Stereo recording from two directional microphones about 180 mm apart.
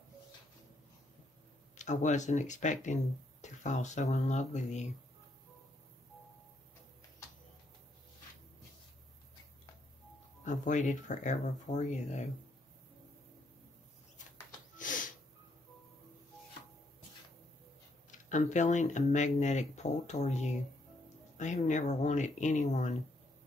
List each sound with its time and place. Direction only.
1.8 s speech: 40° left (ahead or behind)
10.4 s speech: 45° left (ahead or behind)
18.1 s speech: 40° left (ahead or behind)